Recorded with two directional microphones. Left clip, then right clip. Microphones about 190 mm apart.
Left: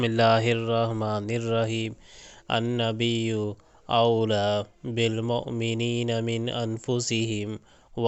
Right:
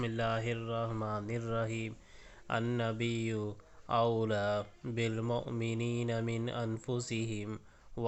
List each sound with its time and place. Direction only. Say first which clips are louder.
0.2 s speech: left 15 dB; 45° left (ahead or behind)
5.2 s speech: left 8 dB; 25° left (ahead or behind)